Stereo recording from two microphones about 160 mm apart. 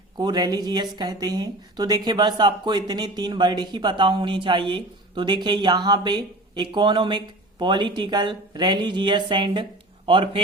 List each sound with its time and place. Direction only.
0.2 s speech: 25° right (ahead or behind)